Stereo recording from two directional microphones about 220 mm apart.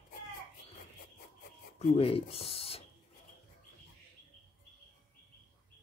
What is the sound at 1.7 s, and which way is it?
Speech, 25° left (ahead or behind).